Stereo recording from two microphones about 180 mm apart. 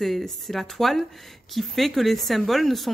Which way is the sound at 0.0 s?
Centre (ahead or behind).